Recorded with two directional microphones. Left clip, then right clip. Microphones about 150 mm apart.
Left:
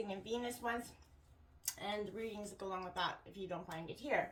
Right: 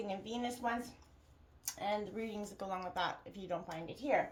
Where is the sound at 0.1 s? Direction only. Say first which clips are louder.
Right 1 dB; 45° right (ahead or behind).